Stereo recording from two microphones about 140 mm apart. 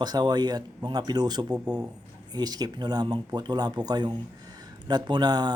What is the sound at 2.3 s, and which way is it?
Speech, 30° right (ahead or behind).